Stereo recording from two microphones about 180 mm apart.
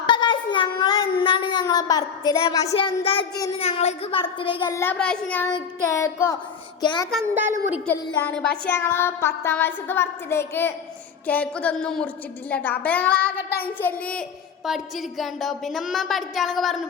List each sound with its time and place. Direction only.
0.0 s child singing: 25° left (ahead or behind)
2.7 s a child's voice: 30° left (ahead or behind)
4.6 s child singing: 15° left (ahead or behind)
5.9 s child singing: 15° left (ahead or behind)
6.8 s a child's voice: 25° left (ahead or behind)
7.2 s a woman's voice: 15° right (ahead or behind)
8.4 s child singing: 5° left (ahead or behind)
11.3 s a child's voice: 10° left (ahead or behind)
12.5 s child singing: 10° left (ahead or behind)
13.7 s a child's voice: 10° left (ahead or behind)